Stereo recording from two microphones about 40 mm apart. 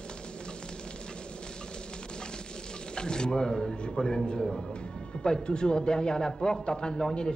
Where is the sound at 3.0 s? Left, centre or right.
Left.